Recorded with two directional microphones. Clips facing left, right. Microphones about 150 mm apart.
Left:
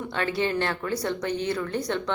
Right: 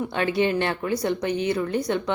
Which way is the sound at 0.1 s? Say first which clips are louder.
Right 2 dB; 15° right (ahead or behind).